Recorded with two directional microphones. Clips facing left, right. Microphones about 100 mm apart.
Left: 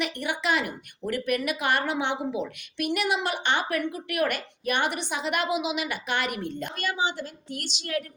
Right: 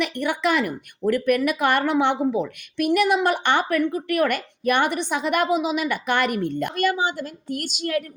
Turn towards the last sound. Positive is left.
turn(degrees=-50)  # may be behind; listen again after turning